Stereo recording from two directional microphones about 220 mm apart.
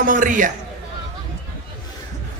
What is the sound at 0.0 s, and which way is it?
Speech, 35° right (ahead or behind).